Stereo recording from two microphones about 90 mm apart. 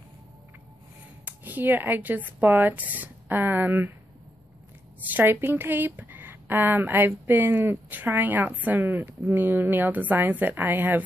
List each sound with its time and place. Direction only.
1.2 s speech: 20° right (ahead or behind)
5.1 s speech: 25° right (ahead or behind)